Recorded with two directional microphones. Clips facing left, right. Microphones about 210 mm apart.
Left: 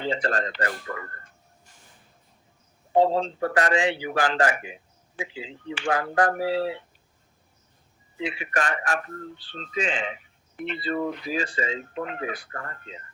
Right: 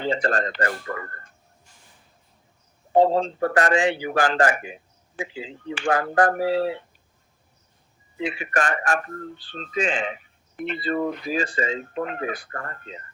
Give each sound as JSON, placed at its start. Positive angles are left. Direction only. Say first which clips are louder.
{"t": 0.0, "sound": "a man's voice", "louder": "right 3 dB", "side_deg": -45}
{"t": 2.9, "sound": "a man's voice", "louder": "right 2 dB", "side_deg": -45}
{"t": 8.2, "sound": "a man's voice", "louder": "right 3 dB", "side_deg": -50}